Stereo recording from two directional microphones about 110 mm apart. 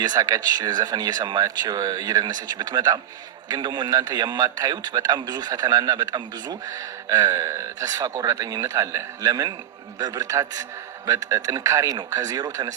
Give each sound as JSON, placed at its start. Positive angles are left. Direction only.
{"t": 0.0, "sound": "a man's voice", "side_deg": -35}